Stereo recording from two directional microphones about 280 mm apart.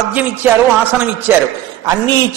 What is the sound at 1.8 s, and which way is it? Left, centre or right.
Speech, centre.